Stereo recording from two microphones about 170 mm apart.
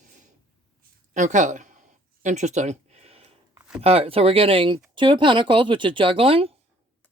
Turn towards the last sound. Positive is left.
turn(degrees=-35)  # may be behind; listen again after turning